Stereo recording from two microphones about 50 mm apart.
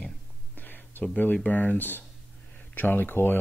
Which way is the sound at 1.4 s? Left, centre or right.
Left.